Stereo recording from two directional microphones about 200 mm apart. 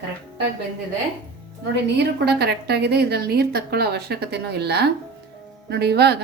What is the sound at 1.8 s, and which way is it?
A woman's voice, 55° right (ahead or behind).